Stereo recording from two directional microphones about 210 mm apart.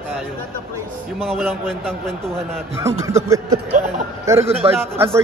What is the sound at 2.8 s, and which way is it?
Speech, 15° right (ahead or behind).